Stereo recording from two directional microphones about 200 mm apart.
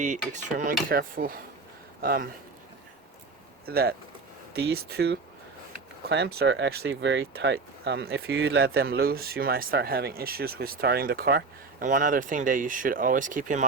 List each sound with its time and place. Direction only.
0.0 s speech: 40° right (ahead or behind)
3.7 s speech: 50° right (ahead or behind)